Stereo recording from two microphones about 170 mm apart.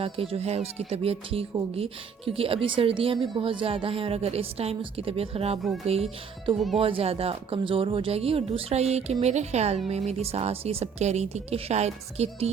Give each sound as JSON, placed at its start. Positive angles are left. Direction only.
{"t": 0.0, "sound": "speech", "side_deg": -35}